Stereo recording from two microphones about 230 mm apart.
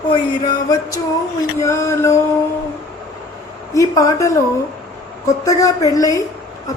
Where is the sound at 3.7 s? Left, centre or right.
Centre.